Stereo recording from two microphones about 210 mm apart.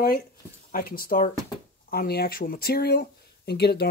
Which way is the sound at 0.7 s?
45° left (ahead or behind).